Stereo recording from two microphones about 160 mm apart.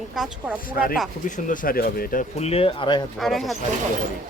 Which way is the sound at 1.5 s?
65° left (ahead or behind).